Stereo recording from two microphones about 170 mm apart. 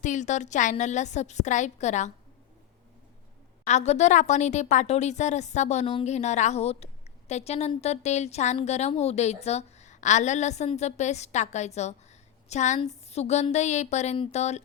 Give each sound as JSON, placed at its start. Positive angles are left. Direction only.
{"t": 0.0, "sound": "a woman's voice", "side_deg": 45}
{"t": 3.7, "sound": "a woman's voice", "side_deg": 40}